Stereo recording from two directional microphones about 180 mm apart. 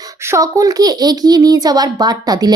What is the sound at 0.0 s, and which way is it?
A child's voice, 15° right (ahead or behind).